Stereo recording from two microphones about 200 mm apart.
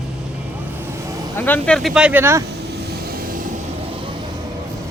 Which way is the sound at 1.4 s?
10° left (ahead or behind).